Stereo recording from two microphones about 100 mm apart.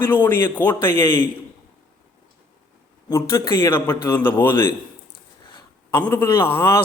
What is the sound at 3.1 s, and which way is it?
Speech, 30° left (ahead or behind).